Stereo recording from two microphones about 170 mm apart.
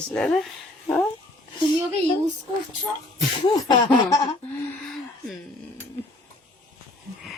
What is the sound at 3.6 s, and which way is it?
Laughter, 25° left (ahead or behind).